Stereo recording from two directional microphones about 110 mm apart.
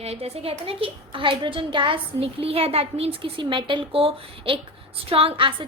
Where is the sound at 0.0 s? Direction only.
70° right (ahead or behind).